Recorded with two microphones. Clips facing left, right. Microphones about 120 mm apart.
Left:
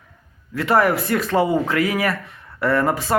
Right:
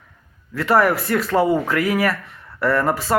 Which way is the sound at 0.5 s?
20° left (ahead or behind).